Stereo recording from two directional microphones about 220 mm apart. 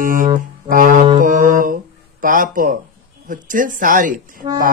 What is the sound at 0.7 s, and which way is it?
Speech, 40° right (ahead or behind).